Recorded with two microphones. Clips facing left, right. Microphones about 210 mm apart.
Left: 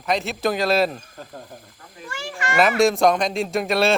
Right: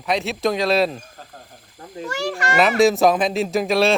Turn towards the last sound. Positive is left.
turn(degrees=0)  # may be behind; listen again after turning